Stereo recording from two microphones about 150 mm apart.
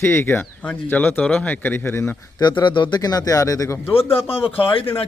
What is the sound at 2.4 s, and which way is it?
Speech, 30° left (ahead or behind).